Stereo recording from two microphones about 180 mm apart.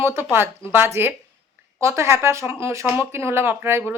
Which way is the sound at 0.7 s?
10° right (ahead or behind).